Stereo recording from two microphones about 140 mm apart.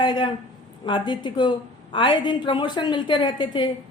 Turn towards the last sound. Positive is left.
turn(degrees=35)  # may be behind; listen again after turning